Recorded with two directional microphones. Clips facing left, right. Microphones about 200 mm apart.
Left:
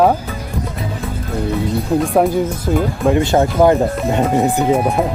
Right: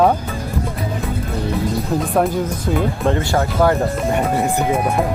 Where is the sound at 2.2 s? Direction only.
15° left (ahead or behind).